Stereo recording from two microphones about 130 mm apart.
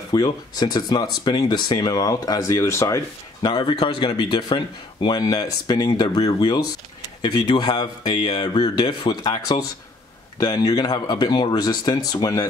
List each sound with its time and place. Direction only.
0.1 s speech: 30° left (ahead or behind)
3.4 s speech: 35° left (ahead or behind)
7.2 s speech: 40° left (ahead or behind)